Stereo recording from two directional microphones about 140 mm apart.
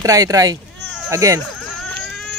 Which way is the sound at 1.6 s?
Centre (ahead or behind).